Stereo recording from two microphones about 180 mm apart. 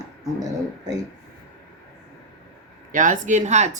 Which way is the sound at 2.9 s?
45° right (ahead or behind).